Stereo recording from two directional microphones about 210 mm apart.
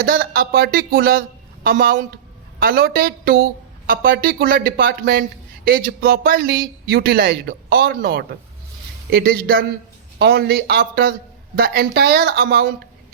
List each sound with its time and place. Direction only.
0.0 s speech: 45° right (ahead or behind)